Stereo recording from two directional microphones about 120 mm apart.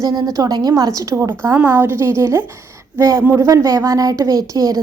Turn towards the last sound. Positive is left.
turn(degrees=-30)  # may be behind; listen again after turning